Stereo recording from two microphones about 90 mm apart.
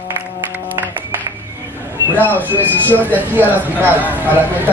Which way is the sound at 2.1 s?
20° right (ahead or behind).